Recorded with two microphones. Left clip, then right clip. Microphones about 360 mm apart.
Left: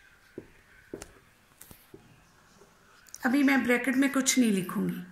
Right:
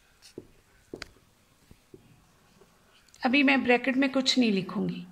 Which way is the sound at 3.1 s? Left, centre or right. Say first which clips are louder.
Right 2 dB; right.